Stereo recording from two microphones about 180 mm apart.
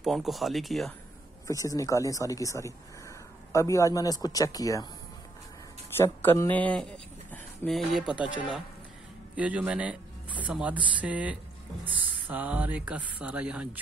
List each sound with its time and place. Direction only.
0.0 s speech: centre (ahead or behind)
1.5 s speech: 20° left (ahead or behind)
5.9 s a man's voice: 15° left (ahead or behind); by 13.7 s 5° right (ahead or behind)